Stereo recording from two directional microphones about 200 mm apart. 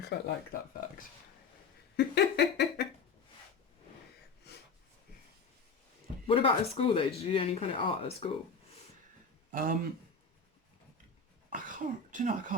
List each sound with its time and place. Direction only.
0.1 s speech: 55° left (ahead or behind)
2.0 s a sound: 55° left (ahead or behind)
6.2 s speech: 25° left (ahead or behind)
9.5 s speech: 45° right (ahead or behind)
11.5 s speech: 40° right (ahead or behind)